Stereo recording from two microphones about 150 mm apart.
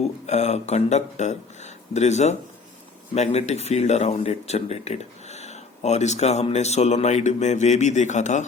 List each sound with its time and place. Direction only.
0.3 s speech: 50° left (ahead or behind)